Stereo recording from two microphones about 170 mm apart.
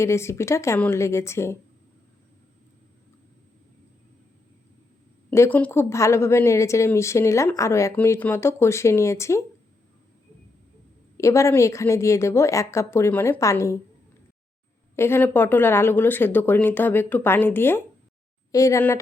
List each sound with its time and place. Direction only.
0.0 s a woman's voice: 15° left (ahead or behind)
5.3 s a woman's voice: 15° left (ahead or behind)
11.2 s a woman's voice: 15° left (ahead or behind)
14.9 s a woman's voice: 15° left (ahead or behind)